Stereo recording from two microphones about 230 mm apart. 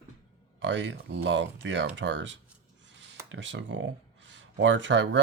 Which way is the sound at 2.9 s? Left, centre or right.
Right.